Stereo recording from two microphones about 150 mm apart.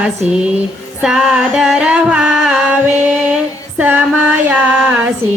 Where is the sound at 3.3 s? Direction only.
10° right (ahead or behind).